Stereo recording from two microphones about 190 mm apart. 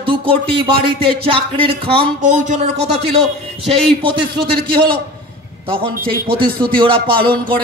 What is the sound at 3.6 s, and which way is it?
Speech, 25° right (ahead or behind).